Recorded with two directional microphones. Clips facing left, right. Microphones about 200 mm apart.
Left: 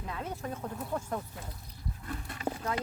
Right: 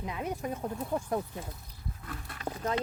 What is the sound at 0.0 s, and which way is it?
Speech, 15° right (ahead or behind).